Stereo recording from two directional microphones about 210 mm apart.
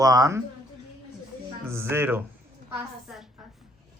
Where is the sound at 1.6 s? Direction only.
10° right (ahead or behind).